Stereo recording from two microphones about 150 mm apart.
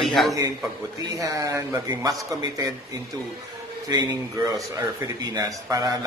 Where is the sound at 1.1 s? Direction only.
25° right (ahead or behind).